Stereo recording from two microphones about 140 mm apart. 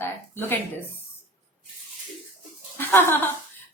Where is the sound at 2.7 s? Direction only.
15° left (ahead or behind).